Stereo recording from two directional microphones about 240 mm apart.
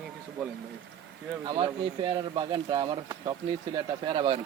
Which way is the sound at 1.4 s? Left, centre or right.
Centre.